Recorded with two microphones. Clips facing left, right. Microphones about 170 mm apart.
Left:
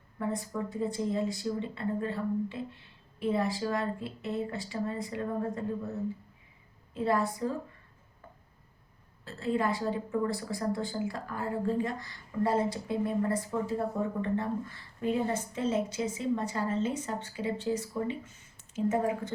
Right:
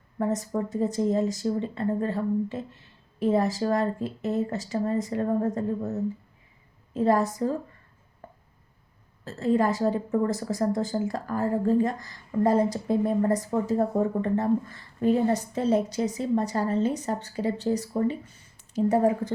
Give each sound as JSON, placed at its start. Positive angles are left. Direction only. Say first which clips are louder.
{"t": 0.2, "sound": "speech", "louder": "right 6 dB", "side_deg": -45}
{"t": 6.9, "sound": "a woman's voice", "louder": "right 6 dB", "side_deg": -40}
{"t": 9.2, "sound": "a woman's voice", "louder": "right 7 dB", "side_deg": -40}